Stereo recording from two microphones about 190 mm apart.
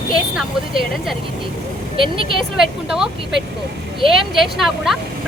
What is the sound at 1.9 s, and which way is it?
Speech, 25° right (ahead or behind).